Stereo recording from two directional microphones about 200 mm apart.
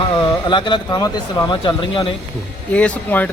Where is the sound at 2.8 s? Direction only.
5° left (ahead or behind).